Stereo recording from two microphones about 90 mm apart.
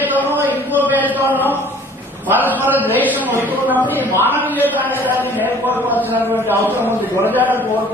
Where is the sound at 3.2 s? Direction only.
25° right (ahead or behind).